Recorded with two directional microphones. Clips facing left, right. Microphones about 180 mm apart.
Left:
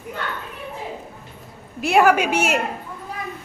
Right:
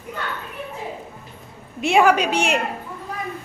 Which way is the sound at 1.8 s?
Centre (ahead or behind).